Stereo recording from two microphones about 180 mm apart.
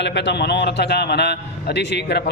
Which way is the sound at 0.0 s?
75° left (ahead or behind).